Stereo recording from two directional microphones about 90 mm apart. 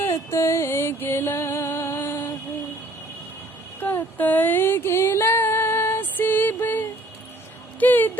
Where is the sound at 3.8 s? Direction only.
20° left (ahead or behind).